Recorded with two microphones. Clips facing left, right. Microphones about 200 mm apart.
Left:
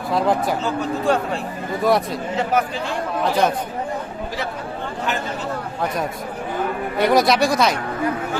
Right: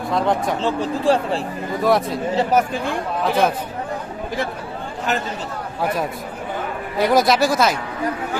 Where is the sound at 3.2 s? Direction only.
Centre (ahead or behind).